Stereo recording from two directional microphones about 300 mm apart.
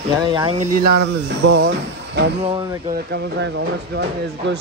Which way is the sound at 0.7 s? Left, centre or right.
Right.